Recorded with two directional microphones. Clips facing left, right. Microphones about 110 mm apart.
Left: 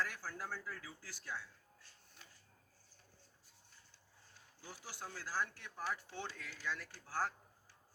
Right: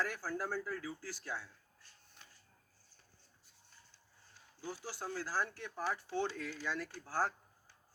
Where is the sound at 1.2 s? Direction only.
10° right (ahead or behind).